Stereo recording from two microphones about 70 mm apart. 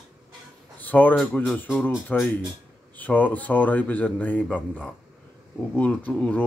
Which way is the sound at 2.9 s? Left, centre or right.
Left.